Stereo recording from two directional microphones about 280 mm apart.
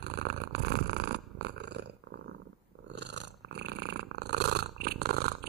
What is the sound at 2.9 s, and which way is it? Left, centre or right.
Purr, right.